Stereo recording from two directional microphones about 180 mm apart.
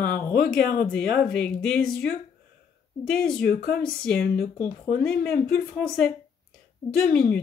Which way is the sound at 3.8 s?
5° left (ahead or behind).